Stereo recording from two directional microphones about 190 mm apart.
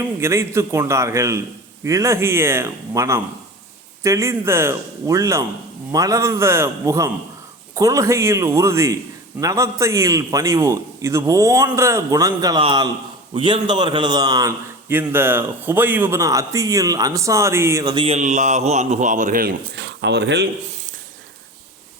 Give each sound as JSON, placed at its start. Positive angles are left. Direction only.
{"t": 0.2, "sound": "a man's voice", "side_deg": -15}
{"t": 19.5, "sound": "speech", "side_deg": -65}